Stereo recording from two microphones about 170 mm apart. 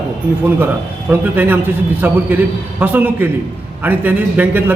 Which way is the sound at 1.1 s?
10° right (ahead or behind).